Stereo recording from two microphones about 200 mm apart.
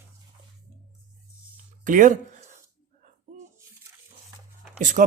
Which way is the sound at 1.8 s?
40° right (ahead or behind).